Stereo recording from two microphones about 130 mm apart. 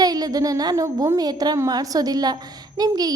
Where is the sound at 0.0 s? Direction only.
30° right (ahead or behind).